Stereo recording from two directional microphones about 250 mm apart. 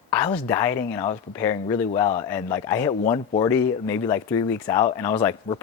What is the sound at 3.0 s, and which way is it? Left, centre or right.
Speech, left.